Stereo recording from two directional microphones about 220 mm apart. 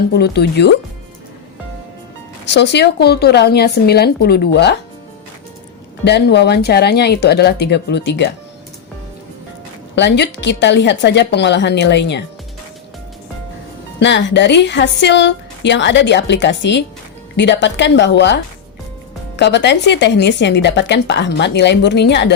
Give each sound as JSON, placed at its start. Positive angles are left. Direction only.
{"t": 0.1, "sound": "a woman's voice", "side_deg": 50}
{"t": 2.5, "sound": "a woman's voice", "side_deg": 50}
{"t": 6.1, "sound": "a woman's voice", "side_deg": 50}
{"t": 9.9, "sound": "a woman's voice", "side_deg": 50}
{"t": 14.0, "sound": "a woman's voice", "side_deg": 55}
{"t": 19.4, "sound": "a woman's voice", "side_deg": 50}